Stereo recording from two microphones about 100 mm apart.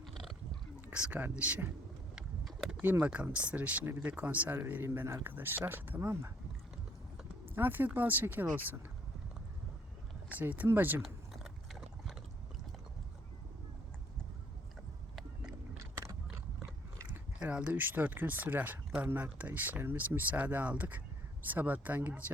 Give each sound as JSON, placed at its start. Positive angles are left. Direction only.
{"t": 0.0, "sound": "pig", "side_deg": 0}
{"t": 0.9, "sound": "speech", "side_deg": -10}
{"t": 2.1, "sound": "vehicle", "side_deg": -5}
{"t": 2.8, "sound": "a man's voice", "side_deg": -15}
{"t": 7.5, "sound": "a man's voice", "side_deg": -20}
{"t": 10.2, "sound": "a man's voice", "side_deg": -15}
{"t": 15.8, "sound": "biting", "side_deg": -30}
{"t": 17.4, "sound": "speech", "side_deg": -10}